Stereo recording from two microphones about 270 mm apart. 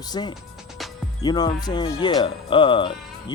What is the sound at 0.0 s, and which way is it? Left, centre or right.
Speech, centre.